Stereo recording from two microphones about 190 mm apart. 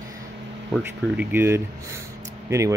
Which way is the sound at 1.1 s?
10° right (ahead or behind).